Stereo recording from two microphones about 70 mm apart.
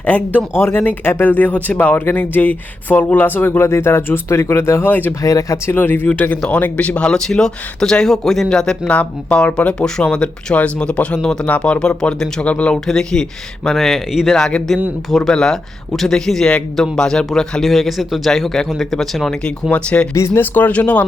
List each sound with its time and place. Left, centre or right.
0.0 s speech: left
3.7 s speech: left
4.9 s speech: left
5.2 s speech: left
5.6 s a man's voice: left; by 19.4 s centre
19.7 s speech: centre
20.1 s speech: left
20.4 s speech: left